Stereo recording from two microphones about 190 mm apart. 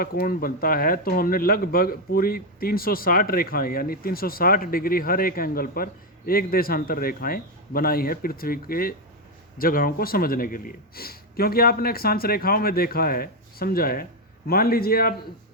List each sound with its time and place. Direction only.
0.0 s speech: 50° left (ahead or behind)